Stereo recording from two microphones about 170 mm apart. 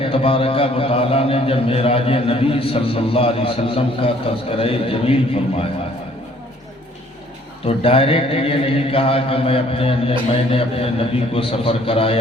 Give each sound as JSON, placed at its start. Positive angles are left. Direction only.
{"t": 0.0, "sound": "a man's voice", "side_deg": 35}
{"t": 7.6, "sound": "a man's voice", "side_deg": 35}